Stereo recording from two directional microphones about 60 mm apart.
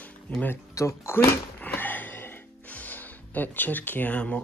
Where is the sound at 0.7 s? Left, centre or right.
Left.